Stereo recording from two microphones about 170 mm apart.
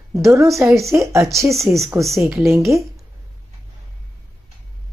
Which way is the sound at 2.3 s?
15° right (ahead or behind).